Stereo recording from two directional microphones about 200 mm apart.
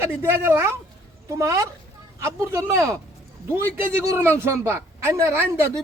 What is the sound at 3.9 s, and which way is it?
A man's voice, 15° right (ahead or behind).